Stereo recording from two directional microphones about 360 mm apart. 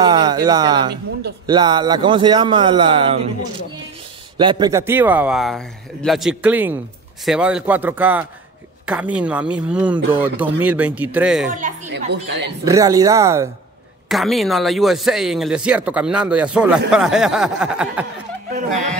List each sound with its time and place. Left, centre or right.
0.0 s a man's voice: centre
4.4 s speech: centre
11.5 s a woman's voice: right
12.6 s a man's voice: centre